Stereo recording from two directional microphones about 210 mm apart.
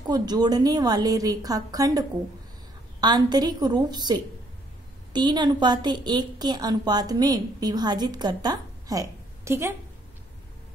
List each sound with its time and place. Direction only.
0.0 s a woman's voice: 20° right (ahead or behind)